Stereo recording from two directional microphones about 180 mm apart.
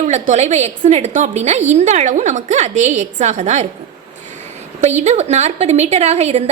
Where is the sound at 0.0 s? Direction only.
40° right (ahead or behind).